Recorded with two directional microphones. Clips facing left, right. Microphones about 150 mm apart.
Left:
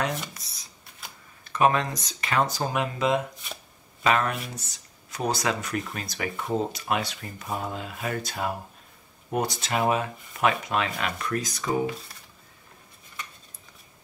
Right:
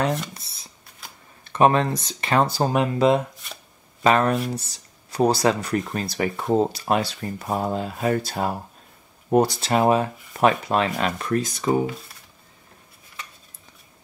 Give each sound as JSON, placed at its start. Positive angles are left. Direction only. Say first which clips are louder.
{"t": 0.3, "sound": "a sound", "louder": "right 4 dB", "side_deg": -25}
{"t": 1.4, "sound": "speech", "louder": "right 4 dB", "side_deg": -30}
{"t": 3.4, "sound": "speech", "louder": "left 1 dB", "side_deg": 0}
{"t": 4.0, "sound": "speech", "louder": "right 6 dB", "side_deg": -30}